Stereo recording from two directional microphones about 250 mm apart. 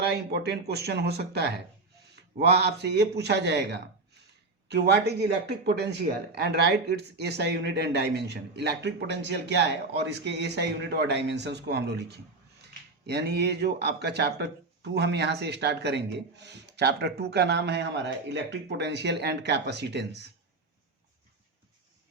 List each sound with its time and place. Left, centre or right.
0.0 s speech: right